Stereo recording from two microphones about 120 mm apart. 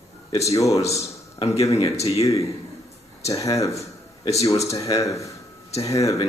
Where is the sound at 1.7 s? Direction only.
60° left (ahead or behind).